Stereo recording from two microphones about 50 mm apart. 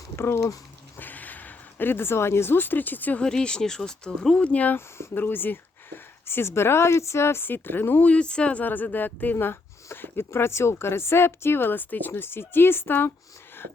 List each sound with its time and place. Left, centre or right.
0.9 s speech: left
3.2 s speech: centre
4.4 s speech: left
4.9 s speech: left
5.2 s a woman's voice: left
8.0 s speech: left
8.6 s speech: left
9.5 s a woman's voice: left